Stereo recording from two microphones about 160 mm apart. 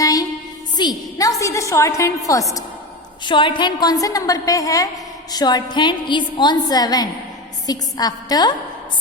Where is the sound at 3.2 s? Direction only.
30° left (ahead or behind).